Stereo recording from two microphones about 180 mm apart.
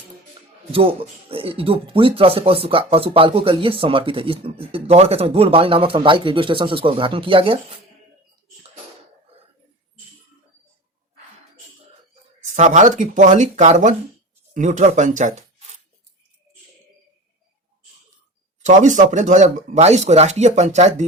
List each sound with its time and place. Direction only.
1.3 s speech: 30° right (ahead or behind)
12.5 s speech: 40° right (ahead or behind)
18.6 s speech: 45° right (ahead or behind)